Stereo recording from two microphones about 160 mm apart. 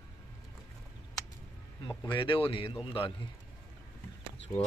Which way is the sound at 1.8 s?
30° left (ahead or behind).